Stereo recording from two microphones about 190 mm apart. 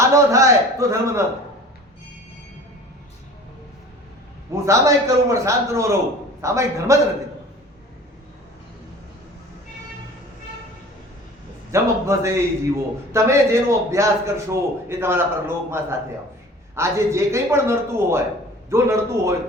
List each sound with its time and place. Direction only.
0.0 s a man's voice: 15° right (ahead or behind)
4.6 s a man's voice: 15° right (ahead or behind)
11.7 s a man's voice: 15° right (ahead or behind)